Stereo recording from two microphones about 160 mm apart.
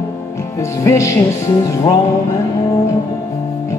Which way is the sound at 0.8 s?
20° left (ahead or behind).